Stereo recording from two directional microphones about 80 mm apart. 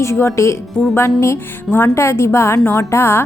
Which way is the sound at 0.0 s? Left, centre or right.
Left.